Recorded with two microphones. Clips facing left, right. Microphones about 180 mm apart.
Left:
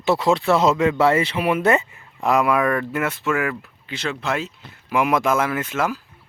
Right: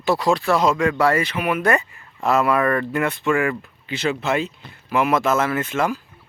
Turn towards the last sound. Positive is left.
turn(degrees=5)  # may be behind; listen again after turning